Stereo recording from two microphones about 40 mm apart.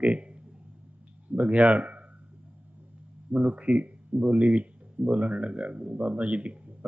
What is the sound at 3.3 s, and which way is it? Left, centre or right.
Speech, right.